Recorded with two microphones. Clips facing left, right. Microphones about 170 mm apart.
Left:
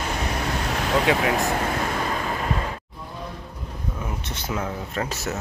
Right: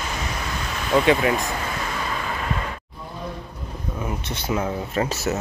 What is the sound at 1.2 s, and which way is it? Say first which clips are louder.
Speech: even; 70° left (ahead or behind).